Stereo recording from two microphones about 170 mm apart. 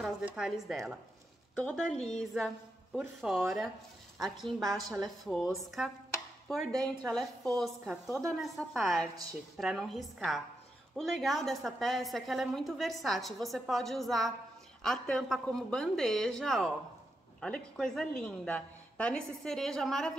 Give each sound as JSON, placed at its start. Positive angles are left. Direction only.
{"t": 0.0, "sound": "speech", "side_deg": -5}
{"t": 2.1, "sound": "a woman's voice", "side_deg": 0}
{"t": 6.7, "sound": "a woman's voice", "side_deg": -20}
{"t": 7.1, "sound": "a woman's voice", "side_deg": 0}